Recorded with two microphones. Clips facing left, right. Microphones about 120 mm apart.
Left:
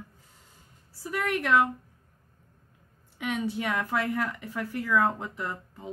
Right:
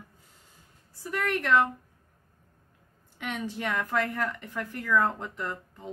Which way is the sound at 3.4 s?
10° left (ahead or behind).